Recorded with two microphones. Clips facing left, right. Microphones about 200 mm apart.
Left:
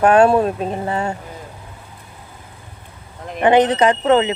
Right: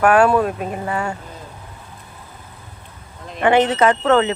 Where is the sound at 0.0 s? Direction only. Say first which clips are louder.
Left 2 dB; 25° left (ahead or behind).